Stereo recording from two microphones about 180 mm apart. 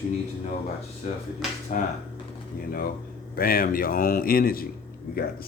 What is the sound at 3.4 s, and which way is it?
Speech, 55° left (ahead or behind).